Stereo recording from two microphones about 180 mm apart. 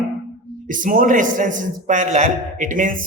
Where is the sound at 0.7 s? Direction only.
50° right (ahead or behind).